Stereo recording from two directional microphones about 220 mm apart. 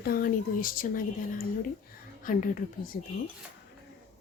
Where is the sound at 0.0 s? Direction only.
40° left (ahead or behind).